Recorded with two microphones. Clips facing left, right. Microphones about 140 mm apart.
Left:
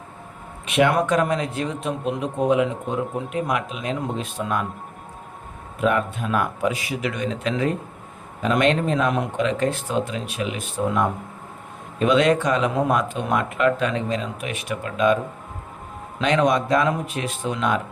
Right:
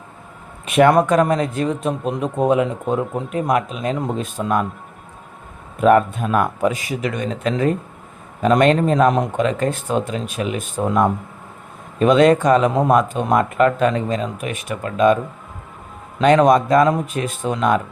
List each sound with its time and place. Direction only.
0.7 s speech: 45° right (ahead or behind)
5.8 s speech: 45° right (ahead or behind)
16.2 s speech: 45° right (ahead or behind)